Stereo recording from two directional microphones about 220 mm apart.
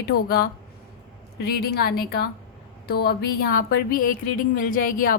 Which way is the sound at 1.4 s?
45° left (ahead or behind).